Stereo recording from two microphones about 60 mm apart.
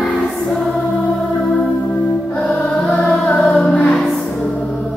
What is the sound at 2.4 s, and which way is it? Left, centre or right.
Music, centre.